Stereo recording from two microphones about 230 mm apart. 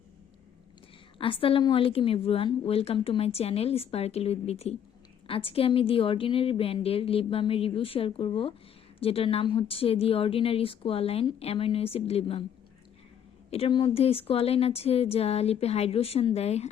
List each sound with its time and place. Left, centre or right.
1.2 s a woman's voice: left
13.5 s a woman's voice: left